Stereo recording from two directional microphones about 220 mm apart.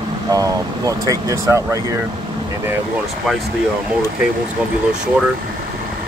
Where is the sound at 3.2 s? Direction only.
Centre (ahead or behind).